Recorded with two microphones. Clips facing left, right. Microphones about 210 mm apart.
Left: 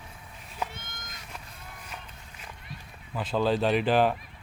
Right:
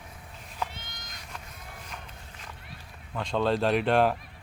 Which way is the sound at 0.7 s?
50° left (ahead or behind).